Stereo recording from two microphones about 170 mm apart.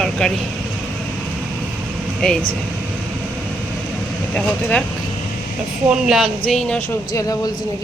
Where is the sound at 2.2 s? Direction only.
5° left (ahead or behind).